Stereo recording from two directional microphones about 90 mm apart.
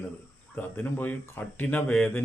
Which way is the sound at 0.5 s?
20° left (ahead or behind).